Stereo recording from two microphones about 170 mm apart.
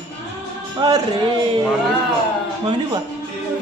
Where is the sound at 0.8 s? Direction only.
25° right (ahead or behind).